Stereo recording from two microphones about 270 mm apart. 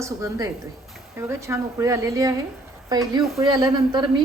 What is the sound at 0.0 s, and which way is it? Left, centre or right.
A woman's voice, centre.